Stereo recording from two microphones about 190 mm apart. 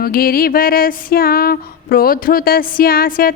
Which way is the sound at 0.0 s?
50° left (ahead or behind).